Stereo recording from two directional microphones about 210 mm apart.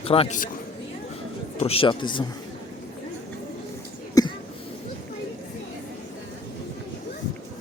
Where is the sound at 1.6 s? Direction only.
30° left (ahead or behind).